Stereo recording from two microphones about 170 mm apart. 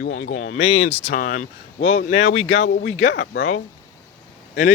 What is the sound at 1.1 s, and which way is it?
Speech, 50° left (ahead or behind).